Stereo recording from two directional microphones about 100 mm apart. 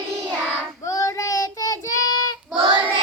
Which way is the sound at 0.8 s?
35° left (ahead or behind).